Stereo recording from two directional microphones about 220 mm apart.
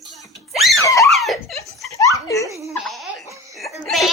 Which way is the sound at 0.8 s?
15° left (ahead or behind).